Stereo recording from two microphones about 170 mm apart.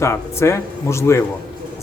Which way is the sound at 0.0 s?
15° left (ahead or behind).